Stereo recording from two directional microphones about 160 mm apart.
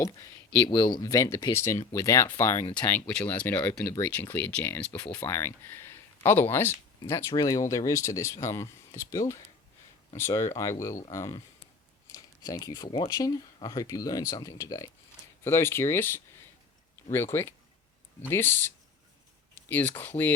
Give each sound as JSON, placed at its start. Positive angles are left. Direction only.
{"t": 0.0, "sound": "speech", "side_deg": 25}
{"t": 19.5, "sound": "a sound", "side_deg": 10}
{"t": 20.0, "sound": "speech", "side_deg": 10}